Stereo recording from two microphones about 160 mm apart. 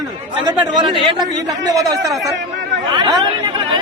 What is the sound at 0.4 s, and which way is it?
Speech, 30° right (ahead or behind).